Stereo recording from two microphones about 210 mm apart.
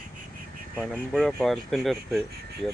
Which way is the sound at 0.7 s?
5° left (ahead or behind).